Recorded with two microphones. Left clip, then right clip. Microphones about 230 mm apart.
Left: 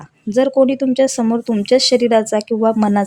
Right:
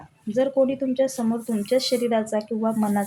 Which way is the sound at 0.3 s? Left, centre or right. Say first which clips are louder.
Left 7 dB; left.